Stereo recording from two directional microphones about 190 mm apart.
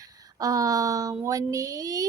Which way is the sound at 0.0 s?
20° right (ahead or behind).